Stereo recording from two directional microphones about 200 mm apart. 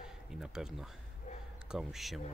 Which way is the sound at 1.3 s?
35° left (ahead or behind).